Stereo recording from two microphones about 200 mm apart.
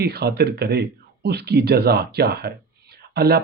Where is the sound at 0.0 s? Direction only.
50° right (ahead or behind).